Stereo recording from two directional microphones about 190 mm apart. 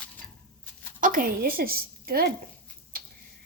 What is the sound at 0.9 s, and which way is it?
A woman's voice, 45° right (ahead or behind).